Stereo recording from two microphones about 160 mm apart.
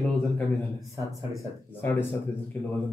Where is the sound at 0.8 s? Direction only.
20° right (ahead or behind).